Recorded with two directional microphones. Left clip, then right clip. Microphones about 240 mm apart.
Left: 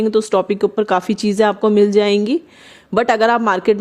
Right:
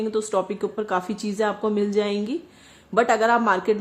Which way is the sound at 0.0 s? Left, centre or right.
Left.